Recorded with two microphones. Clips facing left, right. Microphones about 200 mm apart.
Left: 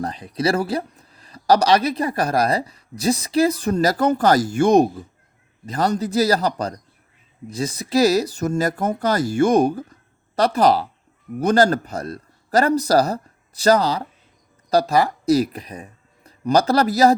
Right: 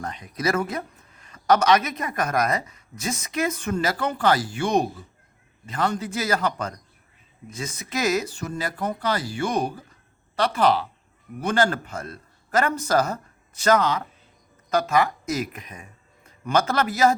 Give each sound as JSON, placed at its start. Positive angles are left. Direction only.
{"t": 0.0, "sound": "speech", "side_deg": 35}